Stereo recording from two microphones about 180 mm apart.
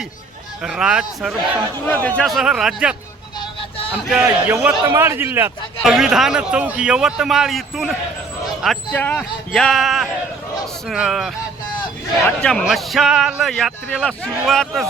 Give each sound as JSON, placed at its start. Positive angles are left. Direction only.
{"t": 0.6, "sound": "a man's voice", "side_deg": -5}
{"t": 1.9, "sound": "a man's voice", "side_deg": 10}
{"t": 4.1, "sound": "a man's voice", "side_deg": -5}
{"t": 5.8, "sound": "a man's voice", "side_deg": 0}